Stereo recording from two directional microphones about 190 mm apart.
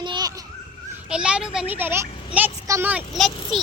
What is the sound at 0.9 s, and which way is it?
A child's voice, 5° right (ahead or behind).